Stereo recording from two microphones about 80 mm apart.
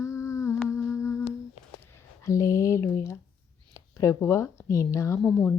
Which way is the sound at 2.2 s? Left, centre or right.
Left.